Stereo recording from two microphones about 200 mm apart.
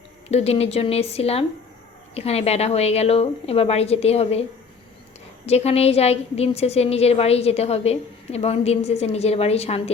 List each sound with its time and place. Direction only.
0.3 s a woman's voice: 30° left (ahead or behind)
5.5 s a woman's voice: 30° left (ahead or behind)